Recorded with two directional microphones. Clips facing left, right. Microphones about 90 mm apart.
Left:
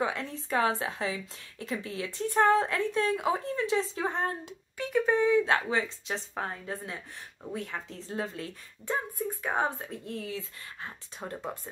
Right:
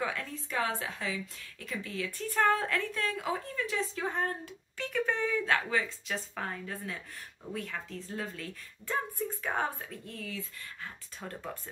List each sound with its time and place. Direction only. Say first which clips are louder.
0.0 s a woman's voice: left 4 dB; 25° left (ahead or behind)
4.7 s a woman's voice: left 6 dB; 15° left (ahead or behind)
10.1 s a woman's voice: left 4 dB; 30° left (ahead or behind)